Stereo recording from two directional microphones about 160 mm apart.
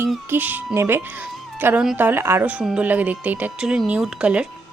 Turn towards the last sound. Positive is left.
turn(degrees=-5)  # may be behind; listen again after turning